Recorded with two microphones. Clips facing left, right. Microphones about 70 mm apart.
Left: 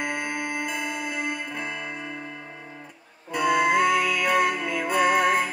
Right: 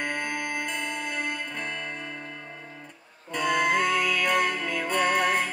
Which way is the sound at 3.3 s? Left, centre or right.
Centre.